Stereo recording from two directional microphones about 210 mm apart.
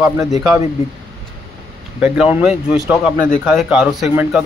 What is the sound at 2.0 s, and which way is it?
Speech, 5° right (ahead or behind).